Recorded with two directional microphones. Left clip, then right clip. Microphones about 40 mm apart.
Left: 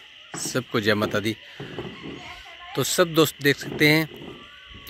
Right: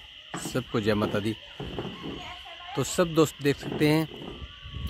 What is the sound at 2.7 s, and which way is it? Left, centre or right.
Speech, centre.